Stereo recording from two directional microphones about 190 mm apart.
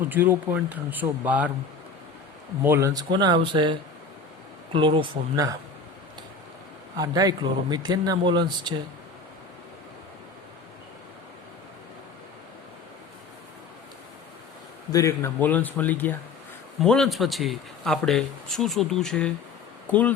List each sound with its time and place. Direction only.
0.1 s speech: 10° right (ahead or behind)
2.6 s speech: 15° right (ahead or behind)
6.9 s speech: 20° right (ahead or behind)
14.9 s speech: 15° left (ahead or behind)